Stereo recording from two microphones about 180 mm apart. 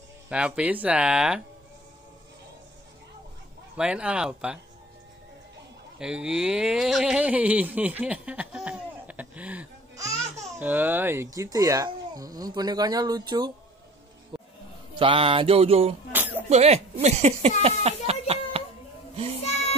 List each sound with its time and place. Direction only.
0.3 s speech: 5° right (ahead or behind)
3.7 s speech: 5° right (ahead or behind)
5.9 s speech: 5° right (ahead or behind); by 13.5 s 25° right (ahead or behind)
15.0 s mantra: 30° right (ahead or behind)
16.1 s music: 10° right (ahead or behind)
16.4 s speech: 35° right (ahead or behind)
19.4 s music: 35° left (ahead or behind)